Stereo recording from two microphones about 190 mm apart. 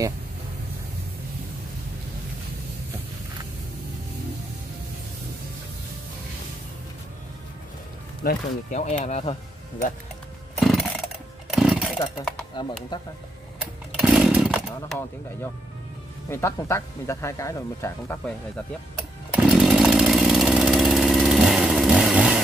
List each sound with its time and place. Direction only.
8.2 s speech: 45° left (ahead or behind)
10.6 s chainsaw: centre (ahead or behind)
12.9 s speech: 25° left (ahead or behind)
13.9 s chainsaw: centre (ahead or behind)
14.9 s speech: 10° left (ahead or behind)
19.3 s chainsaw: 5° right (ahead or behind)